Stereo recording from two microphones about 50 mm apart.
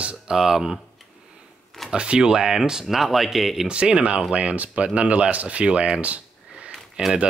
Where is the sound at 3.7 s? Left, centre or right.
Right.